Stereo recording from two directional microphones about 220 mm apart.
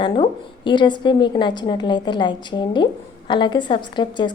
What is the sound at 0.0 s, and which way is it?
A woman's voice, 20° left (ahead or behind).